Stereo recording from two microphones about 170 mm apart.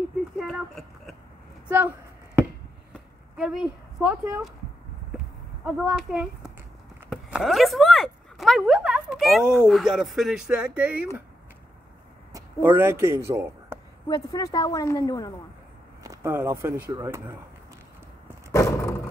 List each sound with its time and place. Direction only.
0.4 s horse: centre (ahead or behind)
1.7 s a sound: 10° right (ahead or behind)
3.3 s speech: 5° right (ahead or behind)
5.7 s speech: centre (ahead or behind)
12.3 s speech: 20° right (ahead or behind)
14.0 s a woman's voice: 20° left (ahead or behind)
16.0 s speech: 20° right (ahead or behind)
18.5 s roar: 15° left (ahead or behind)